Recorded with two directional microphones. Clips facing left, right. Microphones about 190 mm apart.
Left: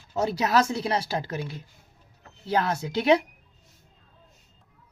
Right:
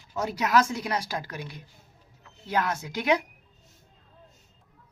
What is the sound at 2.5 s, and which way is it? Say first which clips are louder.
Speech: left 3 dB; 30° left (ahead or behind).